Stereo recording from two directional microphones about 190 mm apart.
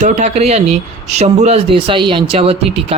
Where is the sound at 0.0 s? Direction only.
35° right (ahead or behind).